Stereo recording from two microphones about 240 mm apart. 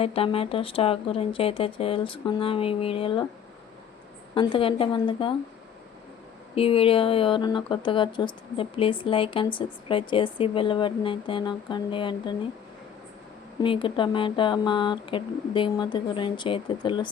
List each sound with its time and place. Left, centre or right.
0.0 s speech: left
4.4 s speech: left
6.6 s speech: left
13.6 s speech: left